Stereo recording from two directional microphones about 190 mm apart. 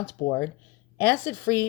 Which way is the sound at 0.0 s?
15° left (ahead or behind).